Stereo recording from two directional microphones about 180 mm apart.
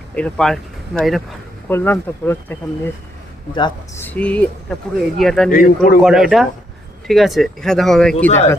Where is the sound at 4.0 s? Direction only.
5° left (ahead or behind).